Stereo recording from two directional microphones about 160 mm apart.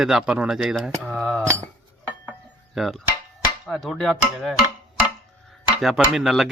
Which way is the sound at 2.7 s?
Centre (ahead or behind).